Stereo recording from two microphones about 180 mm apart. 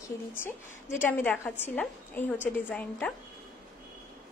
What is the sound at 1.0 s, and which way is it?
A woman's voice, 10° left (ahead or behind).